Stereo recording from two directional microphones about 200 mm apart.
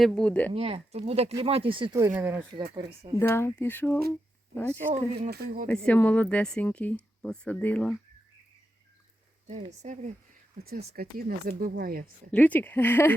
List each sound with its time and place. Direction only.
0.0 s speech: 5° left (ahead or behind)
0.5 s speech: 30° right (ahead or behind)
2.0 s speech: 10° right (ahead or behind)
2.7 s speech: 20° right (ahead or behind)
3.2 s speech: 10° left (ahead or behind)
5.2 s speech: 45° right (ahead or behind)
5.6 s speech: 5° left (ahead or behind)
9.8 s speech: 35° right (ahead or behind)
10.9 s speech: 50° right (ahead or behind)
12.3 s speech: 10° left (ahead or behind)